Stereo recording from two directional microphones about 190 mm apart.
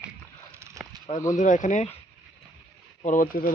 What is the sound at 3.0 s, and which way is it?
Speech, 45° left (ahead or behind).